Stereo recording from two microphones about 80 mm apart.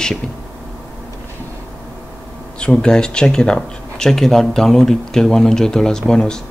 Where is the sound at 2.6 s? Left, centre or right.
Centre.